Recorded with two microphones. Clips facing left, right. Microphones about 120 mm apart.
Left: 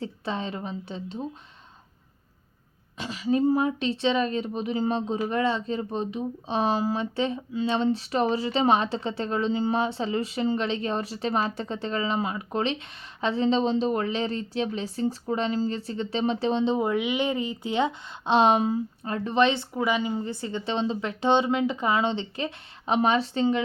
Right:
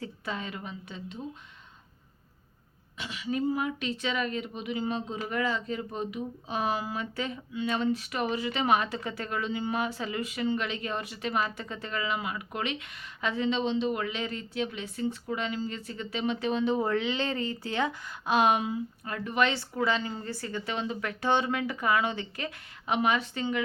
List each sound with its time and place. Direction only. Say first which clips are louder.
0.0 s a woman's voice: left 5 dB; 30° left (ahead or behind)
3.0 s a woman's voice: left 7 dB; 35° left (ahead or behind)